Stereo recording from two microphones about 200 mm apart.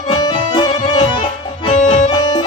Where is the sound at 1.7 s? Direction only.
35° left (ahead or behind).